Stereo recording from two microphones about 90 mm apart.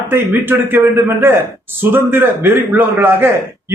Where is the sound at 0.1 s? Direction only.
25° right (ahead or behind).